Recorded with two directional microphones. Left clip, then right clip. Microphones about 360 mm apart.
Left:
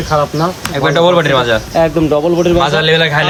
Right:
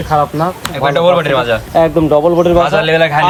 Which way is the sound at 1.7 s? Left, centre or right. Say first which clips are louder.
Right 4 dB; centre.